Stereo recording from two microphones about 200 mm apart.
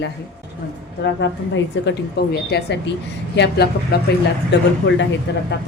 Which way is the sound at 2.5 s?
55° left (ahead or behind).